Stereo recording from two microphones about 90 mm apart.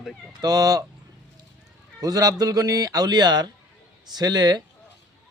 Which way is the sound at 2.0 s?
45° right (ahead or behind).